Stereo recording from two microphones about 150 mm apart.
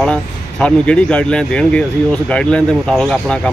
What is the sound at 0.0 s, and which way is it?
Speech, 5° left (ahead or behind).